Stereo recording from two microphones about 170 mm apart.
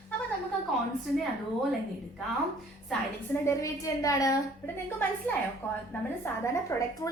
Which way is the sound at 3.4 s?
20° left (ahead or behind).